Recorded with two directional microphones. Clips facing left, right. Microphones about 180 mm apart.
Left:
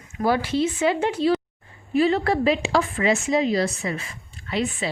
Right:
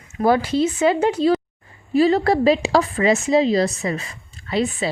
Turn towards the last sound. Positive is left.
turn(degrees=-35)  # may be behind; listen again after turning